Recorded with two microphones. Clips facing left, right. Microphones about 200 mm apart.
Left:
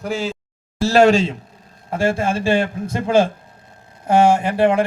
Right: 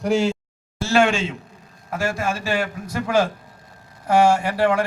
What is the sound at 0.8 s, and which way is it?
A man's voice, 35° left (ahead or behind).